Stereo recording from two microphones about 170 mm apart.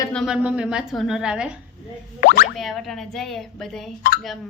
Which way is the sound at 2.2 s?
65° left (ahead or behind).